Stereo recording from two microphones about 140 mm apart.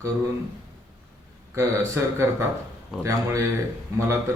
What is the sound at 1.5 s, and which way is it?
A man's voice, 20° right (ahead or behind).